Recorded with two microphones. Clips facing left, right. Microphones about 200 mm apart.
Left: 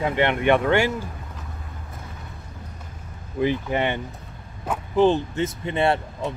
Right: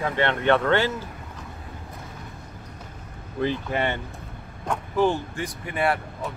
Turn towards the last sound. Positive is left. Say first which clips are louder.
# left 3 dB
turn(degrees=25)  # may be behind; listen again after turning